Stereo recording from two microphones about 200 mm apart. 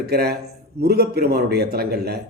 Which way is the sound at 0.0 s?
50° right (ahead or behind).